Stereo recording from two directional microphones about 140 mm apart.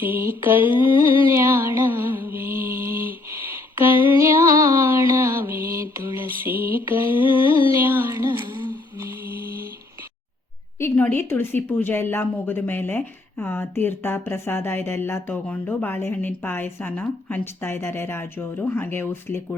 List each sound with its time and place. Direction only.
0.0 s mantra: 15° right (ahead or behind)
0.8 s a sound: 35° left (ahead or behind)
1.3 s music: 20° right (ahead or behind)
3.2 s a sound: 20° right (ahead or behind)
4.2 s music: 20° right (ahead or behind)
5.9 s mantra: 15° right (ahead or behind)
7.7 s music: 15° right (ahead or behind)
9.0 s mantra: 15° right (ahead or behind)
10.8 s speech: 15° left (ahead or behind)